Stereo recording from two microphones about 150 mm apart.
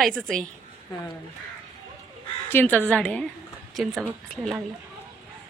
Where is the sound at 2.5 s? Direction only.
15° left (ahead or behind).